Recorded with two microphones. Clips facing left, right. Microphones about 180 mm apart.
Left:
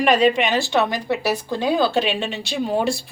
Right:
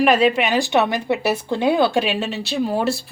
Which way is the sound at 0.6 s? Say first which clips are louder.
Right 2 dB; 20° right (ahead or behind).